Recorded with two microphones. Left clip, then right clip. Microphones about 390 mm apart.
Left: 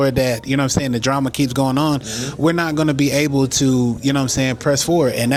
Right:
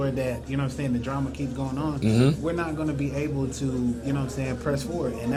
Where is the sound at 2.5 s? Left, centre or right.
Left.